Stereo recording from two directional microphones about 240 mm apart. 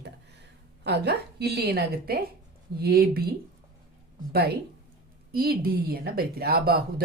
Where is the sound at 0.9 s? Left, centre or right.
Right.